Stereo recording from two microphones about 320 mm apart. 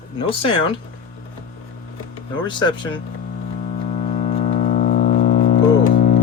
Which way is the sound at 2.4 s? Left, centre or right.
Centre.